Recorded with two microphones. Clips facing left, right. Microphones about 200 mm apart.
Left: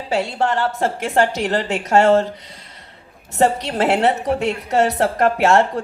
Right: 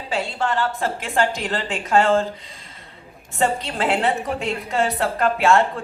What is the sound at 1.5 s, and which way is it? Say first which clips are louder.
Speech: left 5 dB; 40° left (ahead or behind).